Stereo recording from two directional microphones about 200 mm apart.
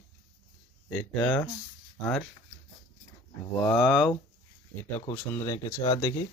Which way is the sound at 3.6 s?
Centre (ahead or behind).